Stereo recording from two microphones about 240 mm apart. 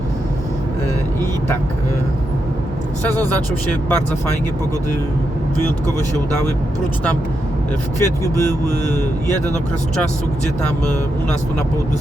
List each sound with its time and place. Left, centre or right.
3.1 s speech: centre
8.0 s speech: centre